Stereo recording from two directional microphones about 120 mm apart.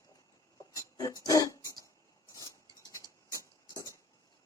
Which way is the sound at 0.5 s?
30° left (ahead or behind).